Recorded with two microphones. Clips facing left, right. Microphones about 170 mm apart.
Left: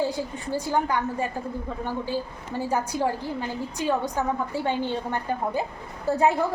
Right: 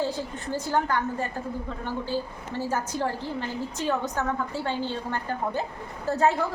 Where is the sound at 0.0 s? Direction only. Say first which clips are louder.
Left 2 dB; 10° left (ahead or behind).